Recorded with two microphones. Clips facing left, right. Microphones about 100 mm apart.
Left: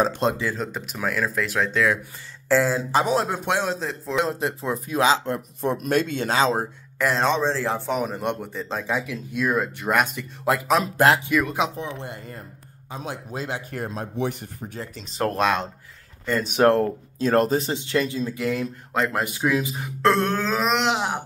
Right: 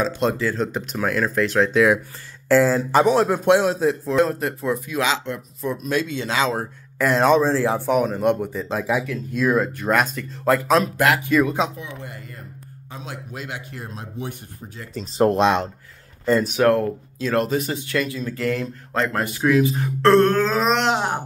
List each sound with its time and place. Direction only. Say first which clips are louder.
0.3 s speech: right 4 dB; 10° left (ahead or behind)
4.2 s speech: right 3 dB; 20° left (ahead or behind)
4.6 s speech: left 2 dB; 35° left (ahead or behind)
5.6 s speech: left 1 dB; 55° left (ahead or behind)
6.3 s speech: left 1 dB; 35° left (ahead or behind)
7.0 s speech: right 5 dB; 5° right (ahead or behind)
9.0 s speech: right 4 dB; 5° left (ahead or behind)
11.7 s speech: left 3 dB; 30° left (ahead or behind)
13.7 s speech: left 5 dB; 50° left (ahead or behind)
15.1 s speech: right 5 dB; 25° right (ahead or behind)
16.5 s speech: even; 30° left (ahead or behind)
18.3 s speech: right 1 dB; 10° left (ahead or behind)
19.7 s speech: right 5 dB; 10° left (ahead or behind)